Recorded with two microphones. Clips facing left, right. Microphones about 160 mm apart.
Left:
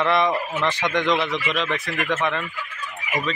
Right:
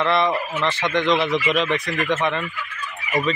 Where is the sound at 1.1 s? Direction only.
5° right (ahead or behind).